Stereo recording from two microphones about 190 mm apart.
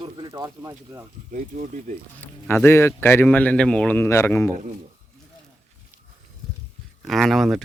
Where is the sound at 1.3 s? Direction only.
40° right (ahead or behind).